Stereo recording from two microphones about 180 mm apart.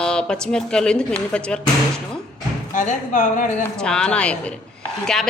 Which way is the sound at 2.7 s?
45° left (ahead or behind).